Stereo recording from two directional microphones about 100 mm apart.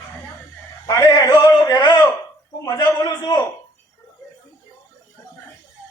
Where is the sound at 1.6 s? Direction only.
45° left (ahead or behind).